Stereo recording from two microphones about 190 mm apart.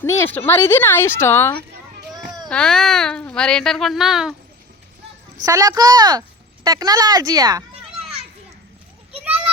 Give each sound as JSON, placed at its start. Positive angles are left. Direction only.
{"t": 0.0, "sound": "speech", "side_deg": 10}
{"t": 5.5, "sound": "speech", "side_deg": -15}